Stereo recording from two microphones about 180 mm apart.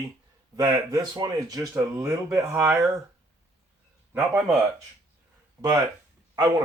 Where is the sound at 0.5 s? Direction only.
20° right (ahead or behind).